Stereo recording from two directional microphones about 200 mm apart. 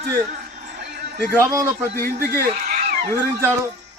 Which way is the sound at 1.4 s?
15° right (ahead or behind).